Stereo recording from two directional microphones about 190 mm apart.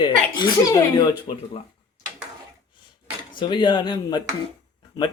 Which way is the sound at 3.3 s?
25° left (ahead or behind).